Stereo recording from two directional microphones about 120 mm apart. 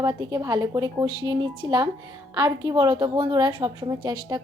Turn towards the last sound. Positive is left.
turn(degrees=-30)  # may be behind; listen again after turning